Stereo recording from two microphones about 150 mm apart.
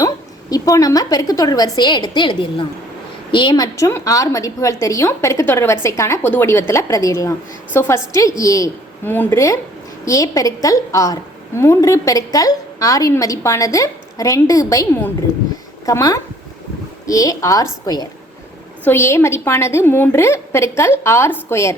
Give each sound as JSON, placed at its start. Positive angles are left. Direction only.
{"t": 0.5, "sound": "a woman's voice", "side_deg": 25}